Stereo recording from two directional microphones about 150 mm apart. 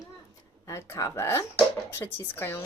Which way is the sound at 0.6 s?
20° left (ahead or behind).